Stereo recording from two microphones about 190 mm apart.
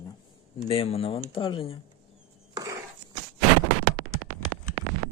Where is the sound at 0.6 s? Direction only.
30° left (ahead or behind).